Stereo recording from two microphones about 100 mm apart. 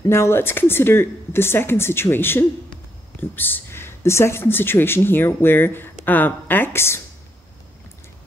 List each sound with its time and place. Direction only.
0.1 s speech: 25° left (ahead or behind)